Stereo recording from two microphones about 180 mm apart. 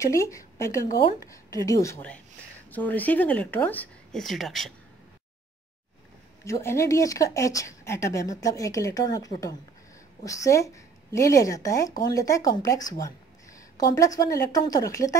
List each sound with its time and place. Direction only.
0.0 s a woman's voice: 15° left (ahead or behind); by 4.7 s centre (ahead or behind)
6.4 s speech: 15° left (ahead or behind)